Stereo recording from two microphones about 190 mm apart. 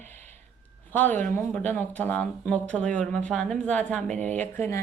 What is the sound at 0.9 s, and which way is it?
Speech, 10° left (ahead or behind).